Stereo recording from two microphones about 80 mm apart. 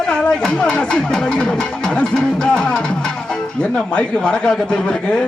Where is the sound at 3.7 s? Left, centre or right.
Centre.